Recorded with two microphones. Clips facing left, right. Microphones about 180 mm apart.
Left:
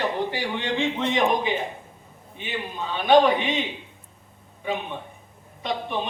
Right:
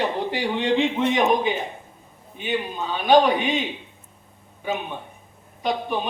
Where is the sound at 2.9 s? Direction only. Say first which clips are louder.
Even; centre (ahead or behind).